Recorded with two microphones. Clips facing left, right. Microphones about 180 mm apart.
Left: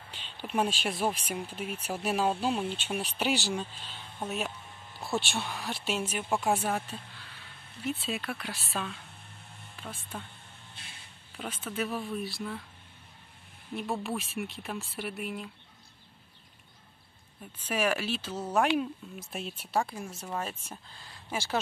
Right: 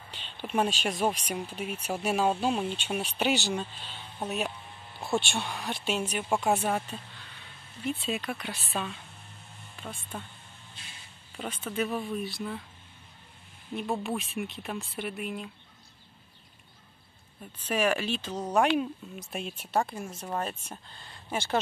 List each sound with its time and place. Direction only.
0.1 s speech: 5° left (ahead or behind)
5.0 s speech: centre (ahead or behind)
10.1 s speech: 5° right (ahead or behind)
11.3 s speech: centre (ahead or behind)
13.7 s speech: centre (ahead or behind)
17.6 s speech: 10° left (ahead or behind)